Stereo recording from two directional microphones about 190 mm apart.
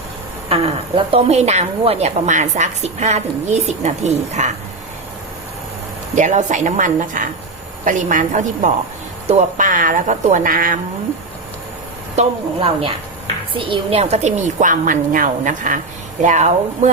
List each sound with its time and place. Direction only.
0.4 s speech: 30° right (ahead or behind)
6.1 s speech: 40° right (ahead or behind)
12.1 s speech: 30° right (ahead or behind)